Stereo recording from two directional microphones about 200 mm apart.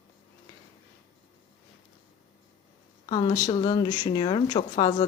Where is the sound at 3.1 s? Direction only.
20° left (ahead or behind).